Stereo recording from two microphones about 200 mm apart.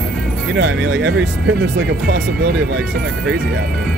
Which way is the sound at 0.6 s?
75° right (ahead or behind).